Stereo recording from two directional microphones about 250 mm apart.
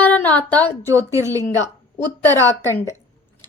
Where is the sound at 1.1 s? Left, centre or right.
Centre.